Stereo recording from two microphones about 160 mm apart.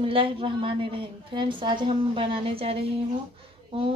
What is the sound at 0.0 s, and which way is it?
A woman's voice, 35° right (ahead or behind).